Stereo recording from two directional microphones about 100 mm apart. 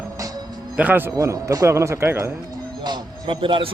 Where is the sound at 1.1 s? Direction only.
35° right (ahead or behind).